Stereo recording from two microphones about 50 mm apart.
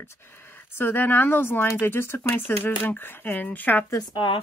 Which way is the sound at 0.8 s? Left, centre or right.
Left.